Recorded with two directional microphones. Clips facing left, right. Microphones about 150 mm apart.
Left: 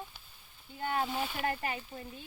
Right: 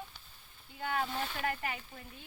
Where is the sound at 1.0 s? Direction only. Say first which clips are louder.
Left 2 dB; 5° left (ahead or behind).